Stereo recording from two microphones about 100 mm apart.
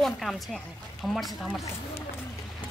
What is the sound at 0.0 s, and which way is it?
Duck, centre (ahead or behind).